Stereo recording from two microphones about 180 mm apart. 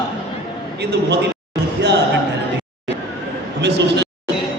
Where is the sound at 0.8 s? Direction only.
70° right (ahead or behind).